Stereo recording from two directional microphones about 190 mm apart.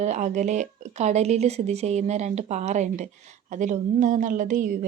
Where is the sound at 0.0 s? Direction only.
40° right (ahead or behind).